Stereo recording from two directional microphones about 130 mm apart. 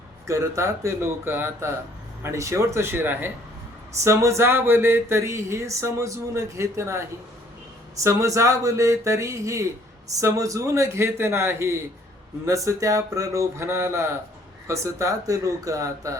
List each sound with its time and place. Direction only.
0.3 s speech: 25° right (ahead or behind)
8.0 s speech: 20° right (ahead or behind)